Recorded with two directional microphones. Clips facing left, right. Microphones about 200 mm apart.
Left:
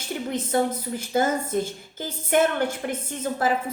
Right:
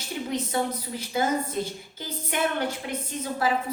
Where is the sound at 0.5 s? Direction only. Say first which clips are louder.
Left 4 dB; 50° left (ahead or behind).